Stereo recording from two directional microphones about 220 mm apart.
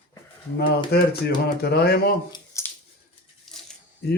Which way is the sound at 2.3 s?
15° left (ahead or behind).